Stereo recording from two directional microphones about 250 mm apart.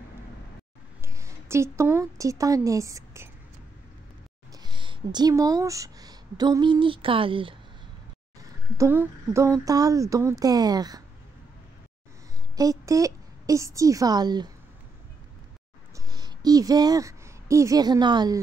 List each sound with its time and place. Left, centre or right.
1.0 s a woman's voice: centre
4.6 s a woman's voice: centre
12.5 s a woman's voice: centre
16.1 s a woman's voice: centre